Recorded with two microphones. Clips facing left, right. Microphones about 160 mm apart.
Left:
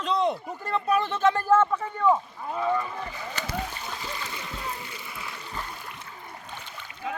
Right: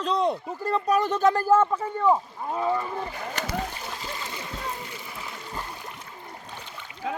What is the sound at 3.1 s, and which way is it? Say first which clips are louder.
Speech: right 3 dB; 50° right (ahead or behind).